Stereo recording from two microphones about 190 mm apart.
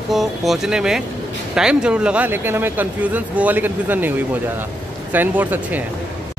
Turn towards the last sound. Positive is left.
turn(degrees=-10)  # may be behind; listen again after turning